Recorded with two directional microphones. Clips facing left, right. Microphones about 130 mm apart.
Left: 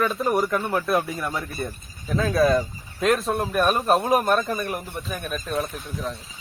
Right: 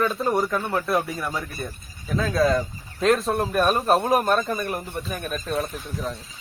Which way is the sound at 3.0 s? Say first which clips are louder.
Right 1 dB; 5° left (ahead or behind).